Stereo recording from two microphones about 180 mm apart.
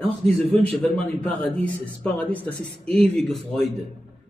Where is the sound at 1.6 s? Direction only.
10° left (ahead or behind).